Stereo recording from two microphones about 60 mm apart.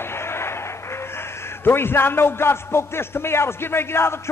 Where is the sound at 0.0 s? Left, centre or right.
Left.